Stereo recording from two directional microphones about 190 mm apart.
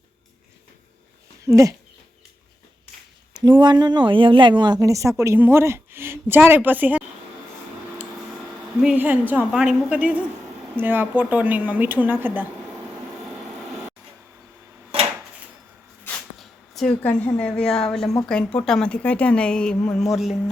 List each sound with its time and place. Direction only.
1.5 s speech: 15° right (ahead or behind)
3.4 s speech: 25° right (ahead or behind)
8.8 s speech: 5° right (ahead or behind)
16.0 s zipper: centre (ahead or behind)
18.3 s speech: 5° left (ahead or behind)